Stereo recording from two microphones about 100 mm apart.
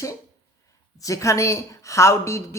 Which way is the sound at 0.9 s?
35° left (ahead or behind).